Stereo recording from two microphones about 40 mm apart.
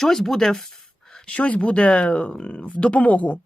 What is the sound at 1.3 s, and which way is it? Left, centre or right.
Speech, left.